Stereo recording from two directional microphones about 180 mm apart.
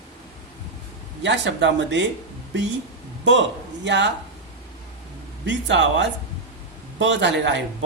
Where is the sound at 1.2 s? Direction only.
80° right.